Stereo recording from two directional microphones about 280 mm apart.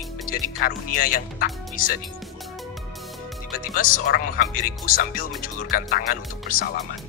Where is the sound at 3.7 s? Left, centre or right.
Left.